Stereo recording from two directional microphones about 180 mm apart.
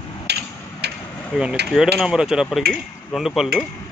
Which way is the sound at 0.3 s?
70° right (ahead or behind).